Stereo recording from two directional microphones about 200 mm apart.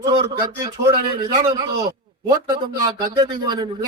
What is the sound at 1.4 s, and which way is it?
A man's voice, 25° right (ahead or behind).